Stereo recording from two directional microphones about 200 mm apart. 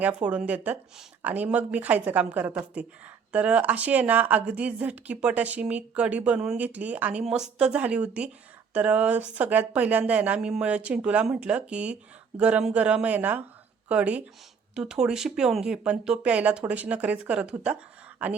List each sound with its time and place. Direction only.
0.0 s a woman's voice: 5° right (ahead or behind)